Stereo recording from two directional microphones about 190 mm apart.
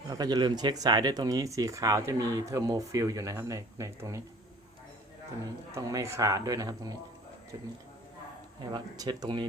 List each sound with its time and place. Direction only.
0.1 s speech: 20° right (ahead or behind)
5.7 s speech: 15° right (ahead or behind)
8.7 s speech: 20° right (ahead or behind)